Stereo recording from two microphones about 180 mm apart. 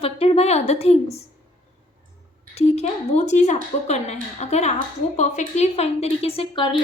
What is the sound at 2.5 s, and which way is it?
A woman's voice, 35° left (ahead or behind).